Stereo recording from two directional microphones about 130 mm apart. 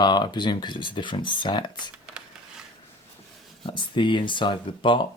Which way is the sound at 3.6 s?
40° left (ahead or behind).